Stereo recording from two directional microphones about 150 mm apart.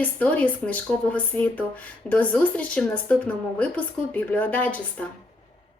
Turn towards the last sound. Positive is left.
turn(degrees=10)  # may be behind; listen again after turning